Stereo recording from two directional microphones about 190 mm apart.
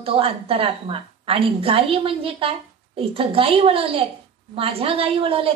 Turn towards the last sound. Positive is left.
turn(degrees=-30)  # may be behind; listen again after turning